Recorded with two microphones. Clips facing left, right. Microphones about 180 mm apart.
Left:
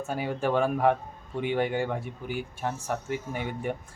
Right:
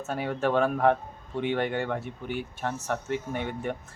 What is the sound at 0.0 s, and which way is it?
Speech, 10° left (ahead or behind).